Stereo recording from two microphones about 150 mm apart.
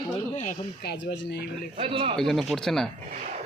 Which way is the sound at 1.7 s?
40° right (ahead or behind).